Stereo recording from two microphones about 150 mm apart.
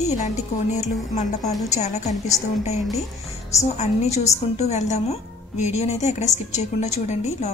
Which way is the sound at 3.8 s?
45° left (ahead or behind).